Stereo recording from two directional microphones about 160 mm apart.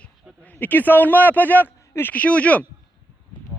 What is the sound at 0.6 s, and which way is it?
A man's voice, 10° left (ahead or behind).